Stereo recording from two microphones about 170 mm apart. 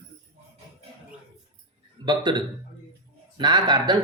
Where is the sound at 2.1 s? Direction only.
25° right (ahead or behind).